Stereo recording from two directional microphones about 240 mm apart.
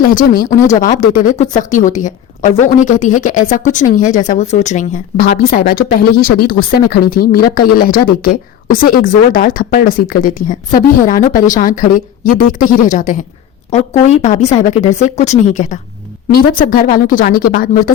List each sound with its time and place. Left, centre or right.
0.0 s a woman's voice: left